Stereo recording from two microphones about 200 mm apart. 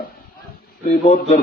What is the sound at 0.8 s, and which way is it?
Speech, 35° left (ahead or behind).